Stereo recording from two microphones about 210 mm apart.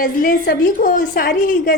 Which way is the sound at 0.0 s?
40° left (ahead or behind).